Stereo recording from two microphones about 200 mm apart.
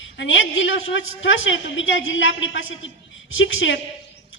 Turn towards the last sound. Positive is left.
turn(degrees=75)  # may be behind; listen again after turning